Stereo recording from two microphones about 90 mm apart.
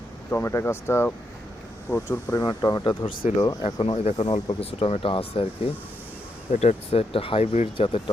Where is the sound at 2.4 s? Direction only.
50° left (ahead or behind).